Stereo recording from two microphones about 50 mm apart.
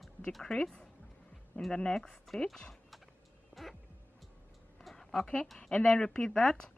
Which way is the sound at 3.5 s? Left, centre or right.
Left.